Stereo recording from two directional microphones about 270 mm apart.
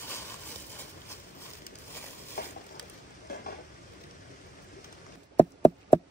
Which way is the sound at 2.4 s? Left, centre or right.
Left.